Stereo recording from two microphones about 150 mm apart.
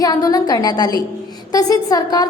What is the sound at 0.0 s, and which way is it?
A woman's voice, 25° left (ahead or behind).